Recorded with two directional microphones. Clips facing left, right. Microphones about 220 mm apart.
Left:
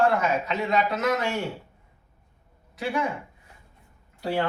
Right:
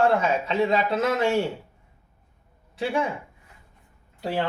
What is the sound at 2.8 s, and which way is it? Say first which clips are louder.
Speech: right 3 dB; 30° right (ahead or behind).